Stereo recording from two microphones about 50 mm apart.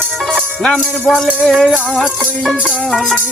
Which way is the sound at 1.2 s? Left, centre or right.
Centre.